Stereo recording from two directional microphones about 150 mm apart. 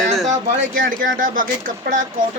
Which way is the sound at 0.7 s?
65° right (ahead or behind).